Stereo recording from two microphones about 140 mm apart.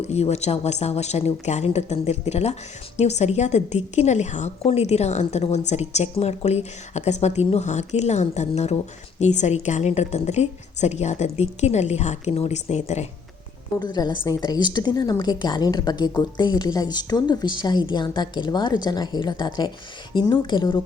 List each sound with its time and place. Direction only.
0.0 s a woman's voice: 50° left (ahead or behind)
13.7 s a woman's voice: 30° left (ahead or behind)